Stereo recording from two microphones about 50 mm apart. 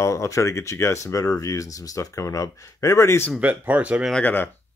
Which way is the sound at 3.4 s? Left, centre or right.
Right.